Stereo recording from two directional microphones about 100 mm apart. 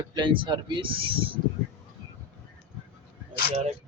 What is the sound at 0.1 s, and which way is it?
Speech, 50° right (ahead or behind).